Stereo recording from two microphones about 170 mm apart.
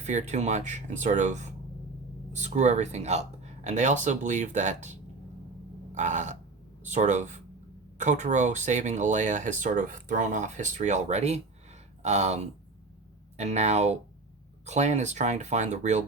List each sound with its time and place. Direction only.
0.0 s speech: 45° right (ahead or behind)
5.9 s burping: 45° right (ahead or behind)
6.8 s speech: 45° right (ahead or behind)